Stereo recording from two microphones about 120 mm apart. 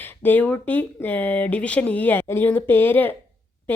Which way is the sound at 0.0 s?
15° left (ahead or behind).